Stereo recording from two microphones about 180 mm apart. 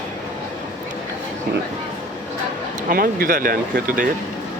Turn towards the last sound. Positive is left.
turn(degrees=-50)  # may be behind; listen again after turning